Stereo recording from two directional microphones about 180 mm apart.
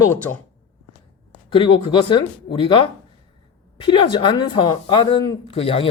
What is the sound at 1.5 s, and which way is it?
A woman's voice, 30° left (ahead or behind).